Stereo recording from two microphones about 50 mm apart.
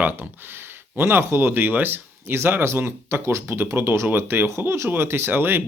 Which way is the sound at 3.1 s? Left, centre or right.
Right.